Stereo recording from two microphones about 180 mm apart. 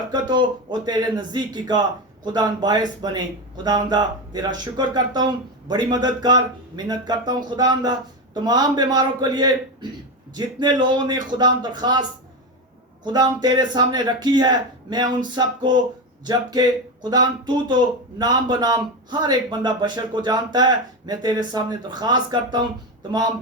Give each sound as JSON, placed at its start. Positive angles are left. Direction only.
{"t": 0.1, "sound": "speech", "side_deg": -25}
{"t": 13.1, "sound": "speech", "side_deg": -20}